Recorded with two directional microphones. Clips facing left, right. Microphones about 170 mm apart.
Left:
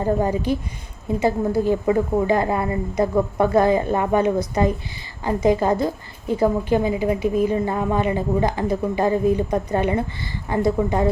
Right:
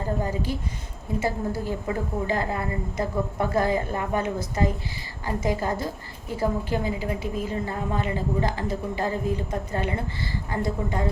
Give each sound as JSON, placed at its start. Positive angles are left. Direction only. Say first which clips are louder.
{"t": 0.0, "sound": "a woman's voice", "louder": "left 7 dB", "side_deg": 20}